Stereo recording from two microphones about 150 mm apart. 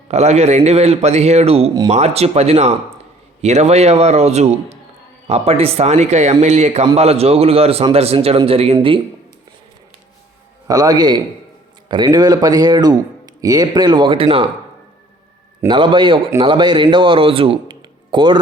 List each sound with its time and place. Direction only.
0.1 s a man's voice: 45° right (ahead or behind)
10.7 s speech: 25° right (ahead or behind)
15.6 s speech: 30° right (ahead or behind)